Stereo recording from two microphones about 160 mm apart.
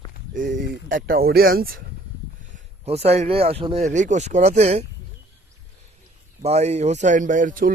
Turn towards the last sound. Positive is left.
turn(degrees=-55)  # may be behind; listen again after turning